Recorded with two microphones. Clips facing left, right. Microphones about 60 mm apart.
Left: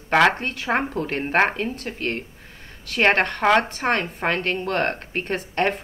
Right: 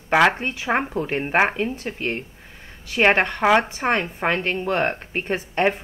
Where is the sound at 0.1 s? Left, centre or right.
Centre.